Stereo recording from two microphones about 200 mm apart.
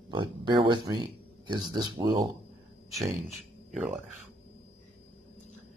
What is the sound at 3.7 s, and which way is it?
Speech, 5° right (ahead or behind).